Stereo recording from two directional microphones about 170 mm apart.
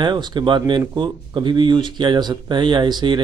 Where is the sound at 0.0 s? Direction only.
25° right (ahead or behind).